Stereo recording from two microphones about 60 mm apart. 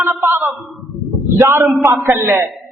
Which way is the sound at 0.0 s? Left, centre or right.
Right.